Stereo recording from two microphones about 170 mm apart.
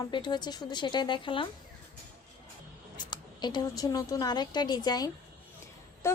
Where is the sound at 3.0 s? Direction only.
25° left (ahead or behind).